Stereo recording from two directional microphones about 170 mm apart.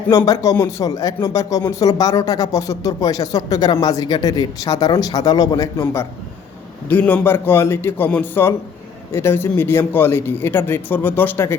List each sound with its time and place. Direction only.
0.1 s a man's voice: 20° left (ahead or behind)